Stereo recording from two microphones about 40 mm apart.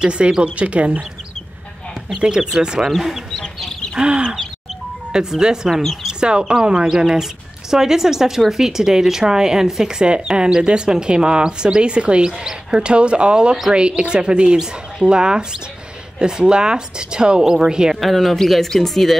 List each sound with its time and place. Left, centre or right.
0.0 s speech: right
2.1 s speech: right
4.0 s speech: right
5.7 s speech: centre
6.0 s speech: right
12.3 s speech: centre
12.8 s speech: right
18.0 s speech: centre